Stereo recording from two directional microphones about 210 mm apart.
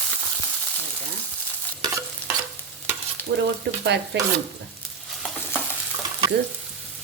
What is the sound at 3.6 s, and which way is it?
Speech, 55° right (ahead or behind).